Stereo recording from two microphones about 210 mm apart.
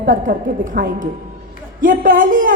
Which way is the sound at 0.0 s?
40° right (ahead or behind).